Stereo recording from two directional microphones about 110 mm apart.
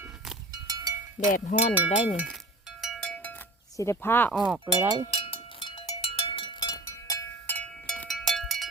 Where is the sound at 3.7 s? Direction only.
25° left (ahead or behind).